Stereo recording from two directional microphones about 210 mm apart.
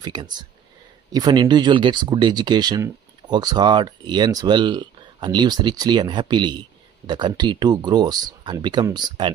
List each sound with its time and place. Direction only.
0.0 s speech: 20° right (ahead or behind)